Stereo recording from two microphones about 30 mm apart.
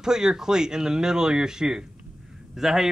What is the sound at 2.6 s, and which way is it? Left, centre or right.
Speech, centre.